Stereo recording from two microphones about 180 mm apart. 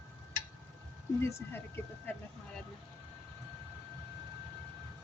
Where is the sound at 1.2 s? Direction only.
15° left (ahead or behind).